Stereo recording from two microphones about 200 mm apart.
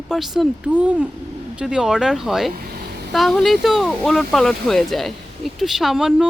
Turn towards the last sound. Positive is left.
turn(degrees=0)  # may be behind; listen again after turning